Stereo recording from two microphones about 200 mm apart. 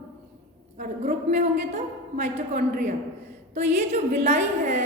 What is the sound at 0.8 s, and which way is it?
A woman's voice, 35° right (ahead or behind).